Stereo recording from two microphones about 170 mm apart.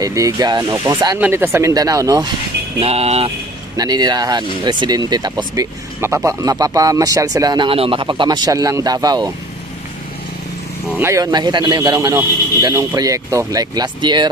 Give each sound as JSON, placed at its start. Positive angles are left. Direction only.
{"t": 0.0, "sound": "speech", "side_deg": -20}
{"t": 2.8, "sound": "speech", "side_deg": -35}
{"t": 3.7, "sound": "speech", "side_deg": -25}
{"t": 11.0, "sound": "speech", "side_deg": -15}